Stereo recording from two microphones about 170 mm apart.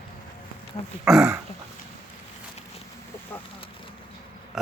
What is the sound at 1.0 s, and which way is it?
Speech, 5° right (ahead or behind).